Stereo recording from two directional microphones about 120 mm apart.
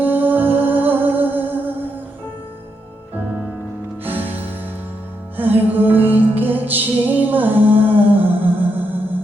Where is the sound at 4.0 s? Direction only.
15° right (ahead or behind).